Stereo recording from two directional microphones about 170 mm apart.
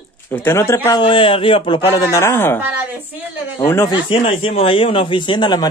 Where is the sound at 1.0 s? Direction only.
30° left (ahead or behind); by 2.6 s 15° left (ahead or behind).